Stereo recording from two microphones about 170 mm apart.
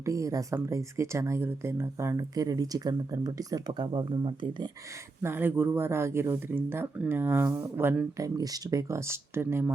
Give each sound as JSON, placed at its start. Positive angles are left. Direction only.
{"t": 0.0, "sound": "speech", "side_deg": -20}
{"t": 5.2, "sound": "speech", "side_deg": -15}